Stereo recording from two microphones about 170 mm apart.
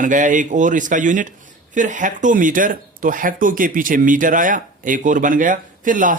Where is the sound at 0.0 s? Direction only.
50° right (ahead or behind).